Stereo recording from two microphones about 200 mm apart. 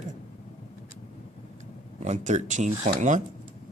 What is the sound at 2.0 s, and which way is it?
Speech, 35° right (ahead or behind).